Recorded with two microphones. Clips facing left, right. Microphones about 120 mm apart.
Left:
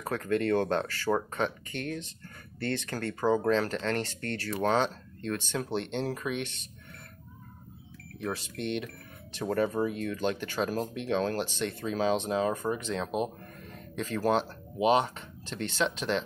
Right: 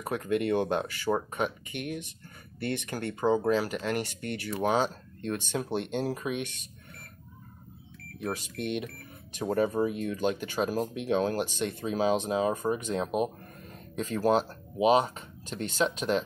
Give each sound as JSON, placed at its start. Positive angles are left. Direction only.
{"t": 0.0, "sound": "speech", "side_deg": -15}
{"t": 8.2, "sound": "speech", "side_deg": -15}
{"t": 14.3, "sound": "speech", "side_deg": -40}